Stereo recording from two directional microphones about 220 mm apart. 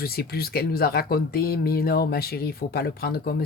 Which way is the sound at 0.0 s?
45° left (ahead or behind).